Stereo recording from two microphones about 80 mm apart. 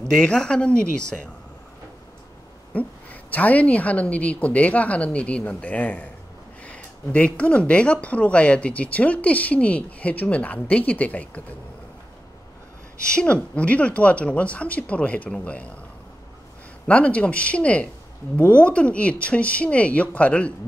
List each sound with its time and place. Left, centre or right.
0.2 s speech: centre
2.7 s speech: centre
13.1 s speech: centre
16.8 s speech: centre